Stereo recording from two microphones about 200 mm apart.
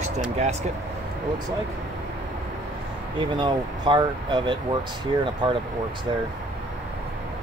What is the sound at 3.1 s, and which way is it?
Speech, 25° right (ahead or behind).